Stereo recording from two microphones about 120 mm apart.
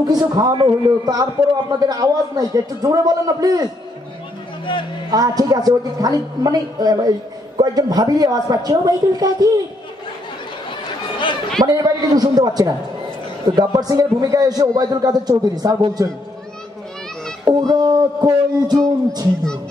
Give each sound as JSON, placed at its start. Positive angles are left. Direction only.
{"t": 0.0, "sound": "a woman's voice", "side_deg": -35}
{"t": 5.1, "sound": "a woman's voice", "side_deg": -30}
{"t": 11.6, "sound": "a woman's voice", "side_deg": -30}
{"t": 17.5, "sound": "a woman's voice", "side_deg": -35}